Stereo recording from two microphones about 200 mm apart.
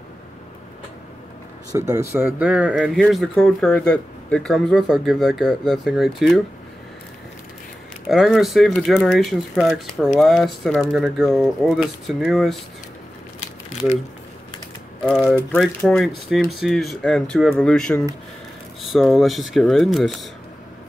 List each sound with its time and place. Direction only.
1.7 s speech: 15° right (ahead or behind)
8.1 s speech: centre (ahead or behind)
15.0 s speech: centre (ahead or behind)